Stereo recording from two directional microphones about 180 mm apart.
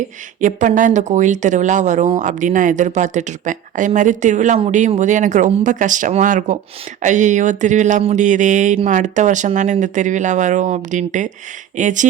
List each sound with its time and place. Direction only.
0.3 s speech: 45° right (ahead or behind)